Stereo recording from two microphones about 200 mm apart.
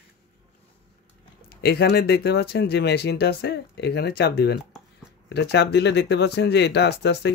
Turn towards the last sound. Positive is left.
turn(degrees=55)  # may be behind; listen again after turning